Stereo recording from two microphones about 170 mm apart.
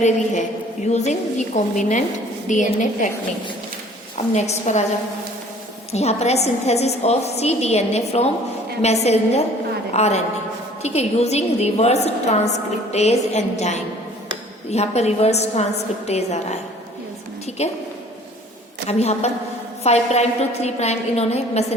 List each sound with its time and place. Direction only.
0.9 s a woman's voice: 40° left (ahead or behind)
4.4 s a woman's voice: 40° left (ahead or behind)
5.9 s a woman's voice: 40° left (ahead or behind)
17.6 s a woman's voice: 40° left (ahead or behind)
18.9 s a woman's voice: 40° left (ahead or behind)